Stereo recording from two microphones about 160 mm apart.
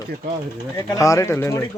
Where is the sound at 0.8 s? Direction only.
20° left (ahead or behind).